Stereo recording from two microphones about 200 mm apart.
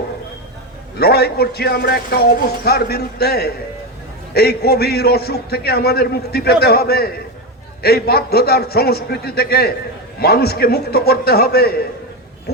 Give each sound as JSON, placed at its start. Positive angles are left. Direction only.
{"t": 0.9, "sound": "a man's voice", "side_deg": 50}